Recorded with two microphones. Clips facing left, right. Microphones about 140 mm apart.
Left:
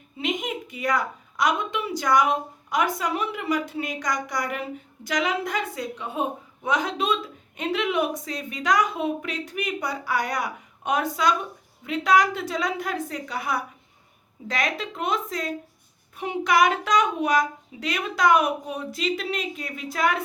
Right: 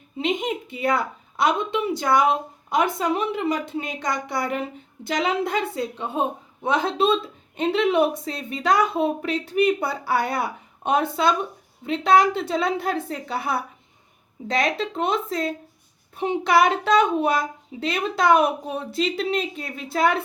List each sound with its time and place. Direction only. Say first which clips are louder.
0.2 s a woman's voice: right 4 dB; 30° right (ahead or behind)